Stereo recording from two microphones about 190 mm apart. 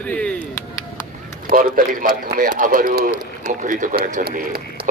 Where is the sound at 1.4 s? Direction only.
45° right (ahead or behind).